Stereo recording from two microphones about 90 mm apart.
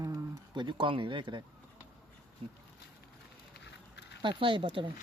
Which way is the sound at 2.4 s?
90° right.